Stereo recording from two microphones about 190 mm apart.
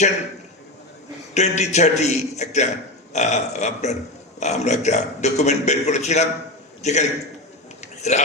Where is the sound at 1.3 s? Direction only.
35° left (ahead or behind).